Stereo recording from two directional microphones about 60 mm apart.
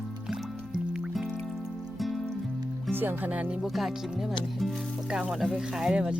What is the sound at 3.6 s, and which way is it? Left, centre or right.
Speech, centre.